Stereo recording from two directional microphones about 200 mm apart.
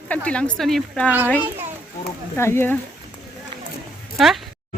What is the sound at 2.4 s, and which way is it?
Speech, 10° left (ahead or behind).